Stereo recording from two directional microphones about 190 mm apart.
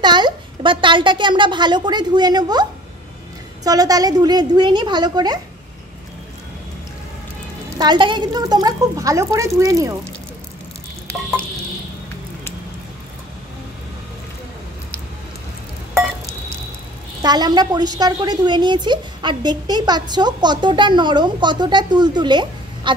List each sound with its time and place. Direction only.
0.0 s a woman's voice: 25° right (ahead or behind)
7.8 s a woman's voice: 25° right (ahead or behind)
17.2 s a woman's voice: 20° right (ahead or behind)